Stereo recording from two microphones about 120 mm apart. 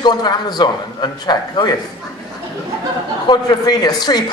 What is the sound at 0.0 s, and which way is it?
A man's voice, 35° left (ahead or behind).